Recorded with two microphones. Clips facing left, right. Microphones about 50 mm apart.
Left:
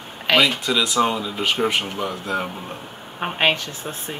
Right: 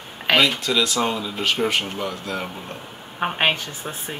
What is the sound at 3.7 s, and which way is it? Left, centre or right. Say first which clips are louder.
Speech: left 1 dB; right.